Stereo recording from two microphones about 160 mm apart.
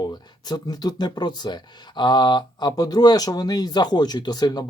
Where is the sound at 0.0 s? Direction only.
25° left (ahead or behind).